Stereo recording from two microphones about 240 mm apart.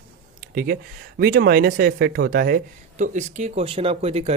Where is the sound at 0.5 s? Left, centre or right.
Right.